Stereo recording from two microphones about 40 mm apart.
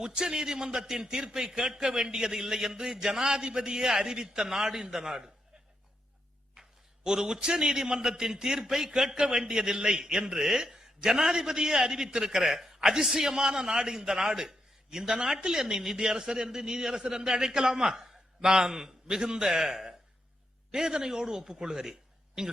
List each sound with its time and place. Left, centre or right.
0.0 s a man's voice: centre
6.5 s a man's voice: centre